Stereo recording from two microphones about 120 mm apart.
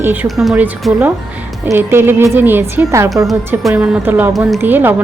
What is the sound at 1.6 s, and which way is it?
A woman's voice, 20° right (ahead or behind).